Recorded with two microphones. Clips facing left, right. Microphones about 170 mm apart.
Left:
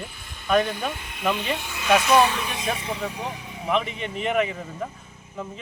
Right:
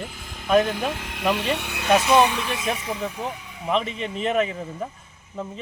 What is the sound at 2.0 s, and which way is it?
Speech, 25° right (ahead or behind).